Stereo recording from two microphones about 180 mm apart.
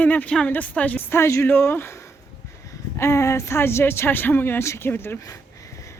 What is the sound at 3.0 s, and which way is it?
A woman's voice, 15° left (ahead or behind).